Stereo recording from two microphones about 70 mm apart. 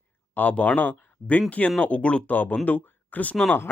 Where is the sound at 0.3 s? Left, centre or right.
Left.